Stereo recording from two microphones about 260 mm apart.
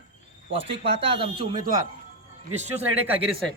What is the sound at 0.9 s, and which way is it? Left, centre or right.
Speech, right.